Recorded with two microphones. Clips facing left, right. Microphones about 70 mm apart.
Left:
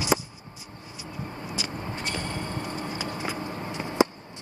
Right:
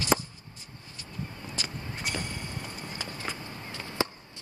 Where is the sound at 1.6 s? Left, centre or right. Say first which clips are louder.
Left 3 dB; centre.